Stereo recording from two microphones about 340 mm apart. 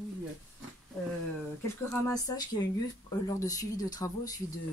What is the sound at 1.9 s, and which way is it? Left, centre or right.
Speech, centre.